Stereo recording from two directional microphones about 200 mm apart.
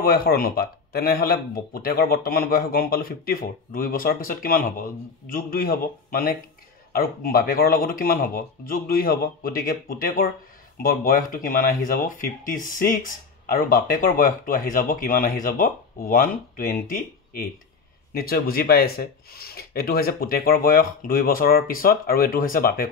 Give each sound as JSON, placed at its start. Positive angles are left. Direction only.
{"t": 0.0, "sound": "speech", "side_deg": 50}